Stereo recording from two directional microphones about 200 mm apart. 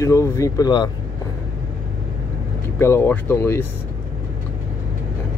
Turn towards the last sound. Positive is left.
turn(degrees=10)  # may be behind; listen again after turning